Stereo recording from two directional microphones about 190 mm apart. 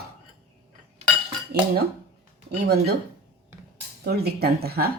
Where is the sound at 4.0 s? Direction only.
55° right (ahead or behind).